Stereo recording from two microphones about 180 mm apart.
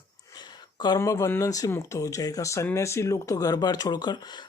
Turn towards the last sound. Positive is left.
turn(degrees=25)  # may be behind; listen again after turning